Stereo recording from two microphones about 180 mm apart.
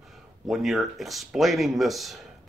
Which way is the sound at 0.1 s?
Centre (ahead or behind).